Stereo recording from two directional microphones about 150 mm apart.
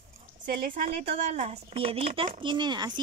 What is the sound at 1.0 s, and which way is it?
Speech, 45° right (ahead or behind).